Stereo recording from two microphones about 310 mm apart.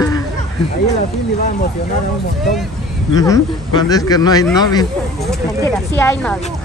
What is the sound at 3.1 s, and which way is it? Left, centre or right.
Speech, centre.